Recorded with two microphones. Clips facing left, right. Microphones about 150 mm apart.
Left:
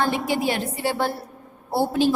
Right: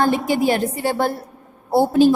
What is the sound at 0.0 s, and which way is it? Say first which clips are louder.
A woman's voice: right 5 dB; 45° right (ahead or behind).